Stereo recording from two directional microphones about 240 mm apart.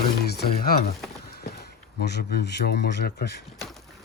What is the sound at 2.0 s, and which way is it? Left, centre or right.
A man's voice, left.